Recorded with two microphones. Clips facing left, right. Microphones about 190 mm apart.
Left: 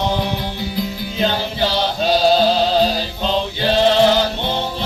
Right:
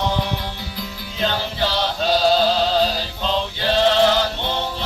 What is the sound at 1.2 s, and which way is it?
Music, 15° left (ahead or behind).